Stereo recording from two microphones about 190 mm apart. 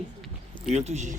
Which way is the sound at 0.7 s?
35° right (ahead or behind).